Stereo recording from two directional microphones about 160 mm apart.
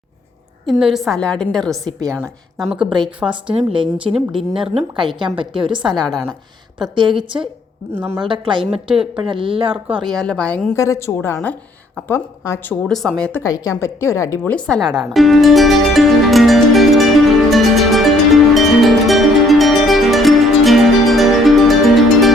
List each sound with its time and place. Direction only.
0.7 s a woman's voice: 5° right (ahead or behind)
1.8 s a woman's voice: 20° right (ahead or behind)
3.2 s a woman's voice: 5° right (ahead or behind)
4.7 s speech: 40° right (ahead or behind)
6.0 s a woman's voice: centre (ahead or behind)
6.9 s speech: 30° right (ahead or behind)
7.9 s a woman's voice: 15° right (ahead or behind)
8.2 s a woman's voice: 30° right (ahead or behind)
10.2 s a woman's voice: 5° left (ahead or behind)
10.8 s a woman's voice: 20° left (ahead or behind)
12.8 s a woman's voice: centre (ahead or behind)
13.4 s a woman's voice: 20° left (ahead or behind)
15.1 s music: centre (ahead or behind)